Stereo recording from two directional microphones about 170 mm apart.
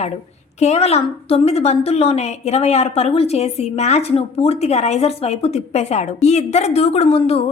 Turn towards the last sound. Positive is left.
turn(degrees=35)  # may be behind; listen again after turning